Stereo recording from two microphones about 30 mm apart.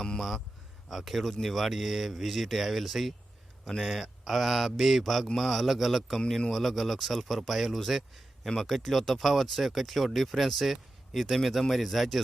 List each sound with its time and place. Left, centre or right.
0.2 s speech: centre
6.1 s speech: centre
6.5 s speech: centre